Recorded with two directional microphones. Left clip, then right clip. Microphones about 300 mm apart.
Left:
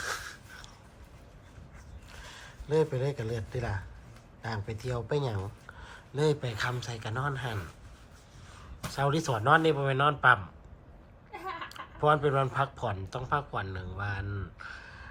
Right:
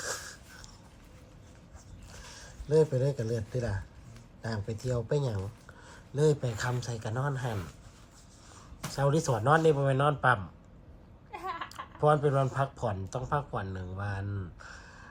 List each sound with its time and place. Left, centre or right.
0.0 s a sound: centre
2.3 s speech: centre
8.9 s speech: centre